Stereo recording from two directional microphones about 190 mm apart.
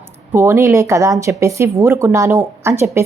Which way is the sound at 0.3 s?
15° right (ahead or behind).